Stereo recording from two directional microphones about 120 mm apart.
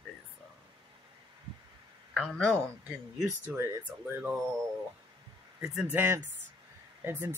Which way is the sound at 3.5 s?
20° right (ahead or behind).